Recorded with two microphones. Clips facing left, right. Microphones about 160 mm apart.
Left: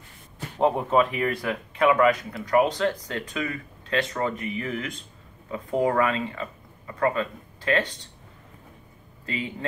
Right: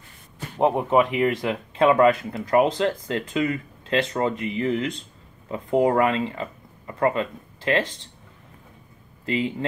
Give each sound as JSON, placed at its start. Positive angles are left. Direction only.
{"t": 0.6, "sound": "speech", "side_deg": -15}
{"t": 9.3, "sound": "speech", "side_deg": -30}